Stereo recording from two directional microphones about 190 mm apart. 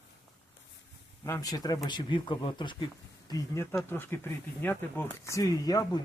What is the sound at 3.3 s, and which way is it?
Speech, 15° left (ahead or behind).